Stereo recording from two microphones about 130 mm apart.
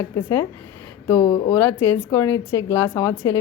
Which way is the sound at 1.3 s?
30° left (ahead or behind).